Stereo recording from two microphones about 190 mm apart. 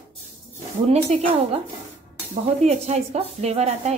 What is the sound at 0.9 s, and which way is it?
Dishes, 35° right (ahead or behind).